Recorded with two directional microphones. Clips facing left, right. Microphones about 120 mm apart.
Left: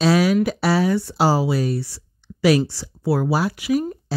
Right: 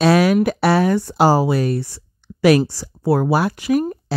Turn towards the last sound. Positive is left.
turn(degrees=-50)  # may be behind; listen again after turning